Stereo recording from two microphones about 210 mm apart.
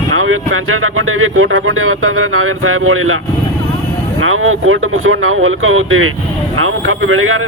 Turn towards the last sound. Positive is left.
turn(degrees=-80)